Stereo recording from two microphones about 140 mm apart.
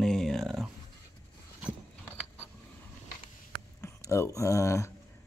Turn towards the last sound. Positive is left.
turn(degrees=20)  # may be behind; listen again after turning